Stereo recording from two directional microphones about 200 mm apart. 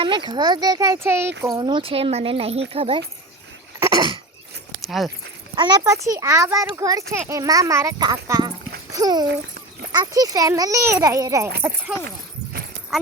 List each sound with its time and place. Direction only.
0.0 s a child's voice: 25° right (ahead or behind)
3.8 s a sound: 20° right (ahead or behind)
4.9 s speech: centre (ahead or behind)
5.5 s a child's voice: 20° right (ahead or behind)
11.6 s speech: 5° right (ahead or behind)